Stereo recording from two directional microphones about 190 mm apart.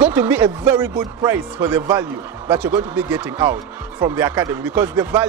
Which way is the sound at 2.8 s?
10° right (ahead or behind).